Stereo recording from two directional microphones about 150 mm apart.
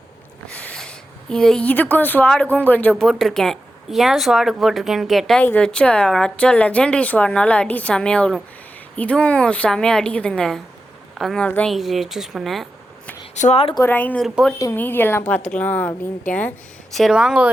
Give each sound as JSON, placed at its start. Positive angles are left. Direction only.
{"t": 0.4, "sound": "a woman's voice", "side_deg": 10}
{"t": 13.3, "sound": "speech", "side_deg": 50}
{"t": 13.8, "sound": "a woman's voice", "side_deg": 10}
{"t": 14.3, "sound": "speech", "side_deg": 0}
{"t": 14.6, "sound": "a woman's voice", "side_deg": 15}